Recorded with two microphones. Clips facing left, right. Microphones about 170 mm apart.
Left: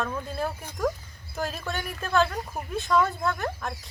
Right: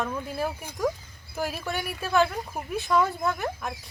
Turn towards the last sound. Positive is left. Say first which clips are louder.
# even
turn(degrees=-15)  # may be behind; listen again after turning